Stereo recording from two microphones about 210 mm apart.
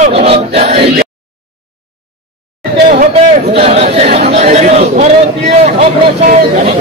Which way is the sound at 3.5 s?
30° right (ahead or behind).